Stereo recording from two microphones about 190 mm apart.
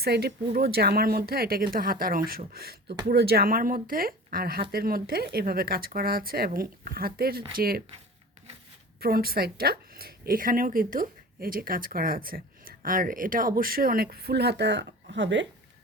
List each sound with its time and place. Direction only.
0.0 s speech: 55° right (ahead or behind)
9.0 s speech: 50° right (ahead or behind); by 15.4 s 70° right (ahead or behind)